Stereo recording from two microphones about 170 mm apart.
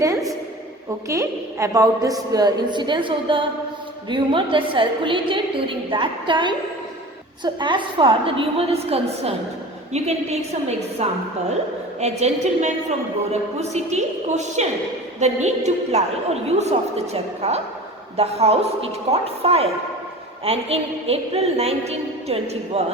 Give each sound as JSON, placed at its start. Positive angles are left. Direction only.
{"t": 1.0, "sound": "a woman's voice", "side_deg": -15}